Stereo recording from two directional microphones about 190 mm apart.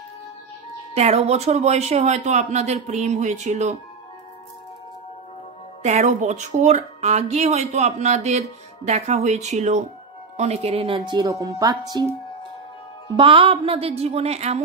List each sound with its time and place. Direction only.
0.9 s speech: 35° right (ahead or behind)
5.9 s speech: 35° right (ahead or behind)